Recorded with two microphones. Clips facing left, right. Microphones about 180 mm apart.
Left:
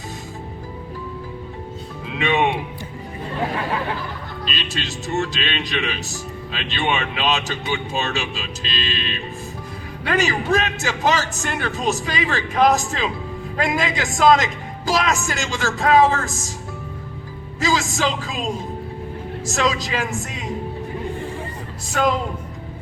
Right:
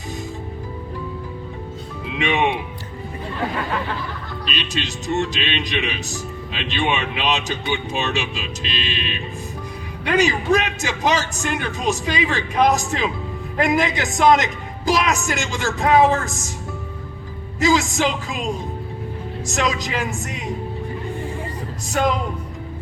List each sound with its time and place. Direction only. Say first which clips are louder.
2.1 s a man's voice: left 1 dB; 15° right (ahead or behind)
4.7 s a man's voice: right 2 dB; 15° right (ahead or behind)
17.6 s a man's voice: right 3 dB; 15° right (ahead or behind)
19.5 s a man's voice: left 1 dB; 15° right (ahead or behind)